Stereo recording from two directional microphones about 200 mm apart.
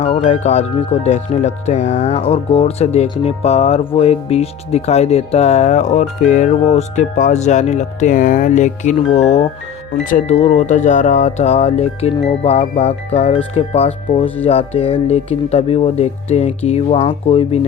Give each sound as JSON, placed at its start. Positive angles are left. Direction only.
{"t": 0.0, "sound": "speech", "side_deg": 30}